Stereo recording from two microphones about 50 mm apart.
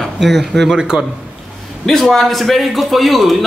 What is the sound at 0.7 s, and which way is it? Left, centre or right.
Speech, centre.